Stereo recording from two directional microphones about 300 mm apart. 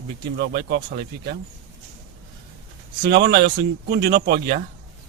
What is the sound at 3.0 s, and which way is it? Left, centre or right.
Speech, right.